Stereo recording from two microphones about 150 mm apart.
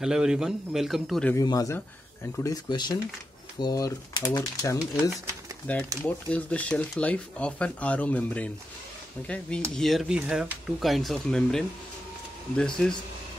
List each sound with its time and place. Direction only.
0.0 s speech: 5° right (ahead or behind)
1.3 s speech: 25° left (ahead or behind)
5.7 s speech: 10° left (ahead or behind)
9.8 s speech: centre (ahead or behind)